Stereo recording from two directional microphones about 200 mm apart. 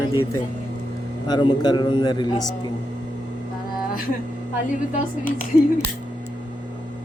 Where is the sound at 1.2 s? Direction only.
20° left (ahead or behind).